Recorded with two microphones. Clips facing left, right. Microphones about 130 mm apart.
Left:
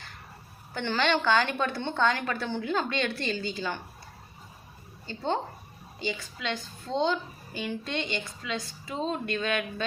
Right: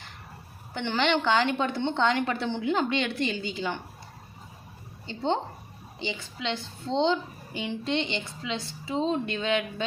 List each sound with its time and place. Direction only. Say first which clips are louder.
0.7 s a woman's voice: right 1 dB; 20° right (ahead or behind)
5.0 s a woman's voice: right 2 dB; 20° right (ahead or behind)